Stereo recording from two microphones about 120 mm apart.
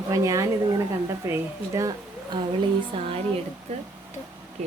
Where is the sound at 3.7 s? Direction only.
65° right (ahead or behind).